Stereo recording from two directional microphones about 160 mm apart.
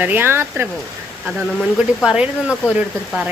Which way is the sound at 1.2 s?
5° right (ahead or behind).